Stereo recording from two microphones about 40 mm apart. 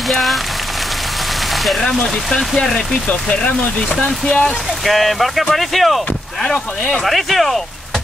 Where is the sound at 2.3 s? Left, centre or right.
Centre.